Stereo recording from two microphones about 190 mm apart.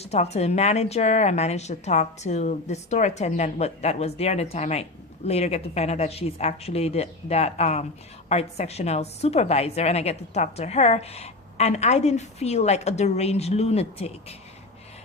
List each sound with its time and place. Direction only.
0.0 s a woman's voice: 35° left (ahead or behind)